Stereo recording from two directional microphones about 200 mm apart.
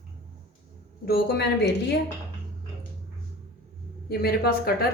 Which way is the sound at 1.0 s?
50° left (ahead or behind).